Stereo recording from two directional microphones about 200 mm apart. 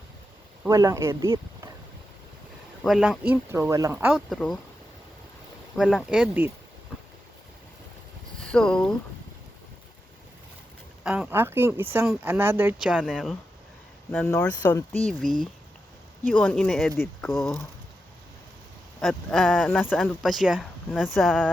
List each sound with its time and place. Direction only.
0.7 s speech: 15° right (ahead or behind)
2.8 s speech: 5° right (ahead or behind)
5.7 s speech: centre (ahead or behind)
8.5 s speech: 5° left (ahead or behind)
11.0 s speech: 10° right (ahead or behind)
14.1 s speech: 10° left (ahead or behind)
14.9 s speech: 40° right (ahead or behind)
16.3 s speech: 5° left (ahead or behind)
18.9 s speech: centre (ahead or behind)